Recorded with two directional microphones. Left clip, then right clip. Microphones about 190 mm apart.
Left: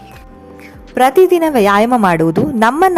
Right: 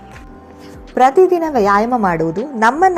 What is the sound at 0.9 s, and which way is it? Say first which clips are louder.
A woman's voice: left 1 dB; 35° left (ahead or behind).